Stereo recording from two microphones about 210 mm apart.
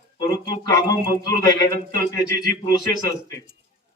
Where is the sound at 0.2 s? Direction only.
20° left (ahead or behind).